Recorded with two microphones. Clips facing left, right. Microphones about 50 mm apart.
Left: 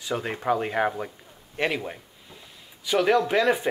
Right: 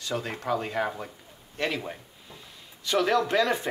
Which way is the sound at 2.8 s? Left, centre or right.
Centre.